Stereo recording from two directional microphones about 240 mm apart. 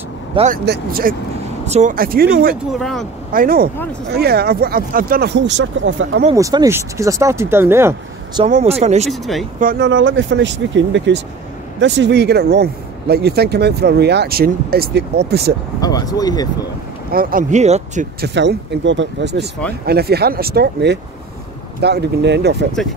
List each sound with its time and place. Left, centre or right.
0.3 s speech: right
0.7 s speech: right
2.7 s speech: centre
3.3 s speech: right
6.3 s speech: centre
8.5 s speech: right
9.1 s speech: centre
9.6 s speech: right
15.8 s speech: centre
17.1 s speech: right
18.2 s speech: right